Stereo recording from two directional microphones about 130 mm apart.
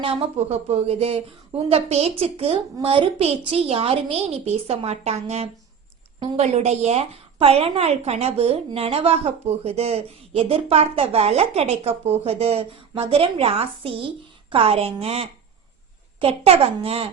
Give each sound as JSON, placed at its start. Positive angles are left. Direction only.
{"t": 0.0, "sound": "a woman's voice", "side_deg": -50}